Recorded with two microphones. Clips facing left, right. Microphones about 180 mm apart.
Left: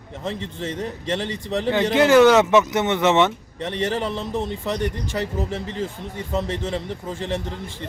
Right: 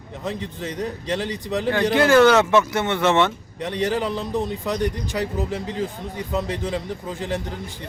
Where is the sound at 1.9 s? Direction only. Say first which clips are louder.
Left 1 dB; 20° left (ahead or behind).